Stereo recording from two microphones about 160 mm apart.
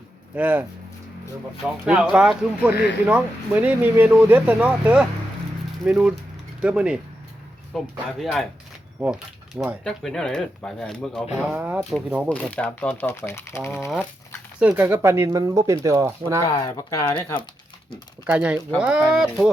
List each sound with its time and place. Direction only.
0.3 s speech: 10° right (ahead or behind)
1.8 s speech: 5° right (ahead or behind)
11.5 s speech: 10° right (ahead or behind)
11.8 s speech: centre (ahead or behind)
12.3 s speech: 10° left (ahead or behind)
14.6 s speech: 10° right (ahead or behind)
16.5 s speech: 20° left (ahead or behind)
18.3 s speech: 10° right (ahead or behind)